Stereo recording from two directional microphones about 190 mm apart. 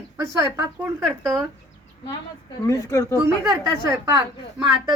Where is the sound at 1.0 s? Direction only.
Centre (ahead or behind).